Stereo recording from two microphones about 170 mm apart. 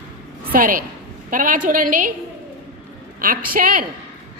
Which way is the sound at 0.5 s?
55° right (ahead or behind).